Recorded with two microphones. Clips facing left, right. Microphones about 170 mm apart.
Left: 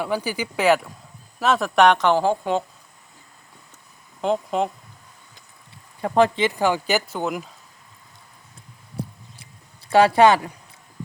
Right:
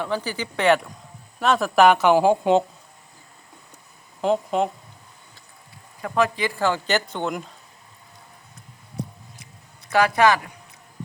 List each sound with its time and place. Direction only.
0.0 s a woman's voice: 10° left (ahead or behind); by 2.6 s 20° right (ahead or behind)
4.2 s speech: centre (ahead or behind)
6.0 s speech: 30° left (ahead or behind); by 7.5 s 5° left (ahead or behind)
9.9 s speech: 30° left (ahead or behind)